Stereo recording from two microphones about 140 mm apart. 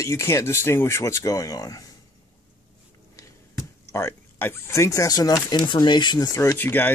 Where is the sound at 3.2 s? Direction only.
20° left (ahead or behind).